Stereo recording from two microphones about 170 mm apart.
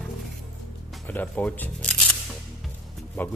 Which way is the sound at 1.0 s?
10° left (ahead or behind).